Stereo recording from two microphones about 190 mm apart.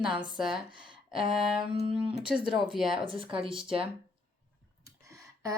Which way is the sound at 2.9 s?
25° right (ahead or behind).